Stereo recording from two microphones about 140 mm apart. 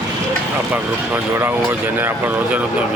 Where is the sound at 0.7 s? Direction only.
15° right (ahead or behind).